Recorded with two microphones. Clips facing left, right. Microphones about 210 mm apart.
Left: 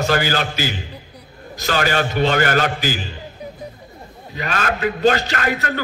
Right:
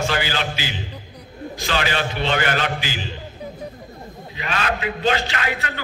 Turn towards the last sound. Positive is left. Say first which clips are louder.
# left 4 dB
turn(degrees=45)  # may be behind; listen again after turning